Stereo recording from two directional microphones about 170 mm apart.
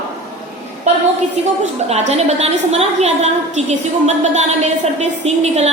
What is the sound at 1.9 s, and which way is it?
A woman's voice, 40° right (ahead or behind).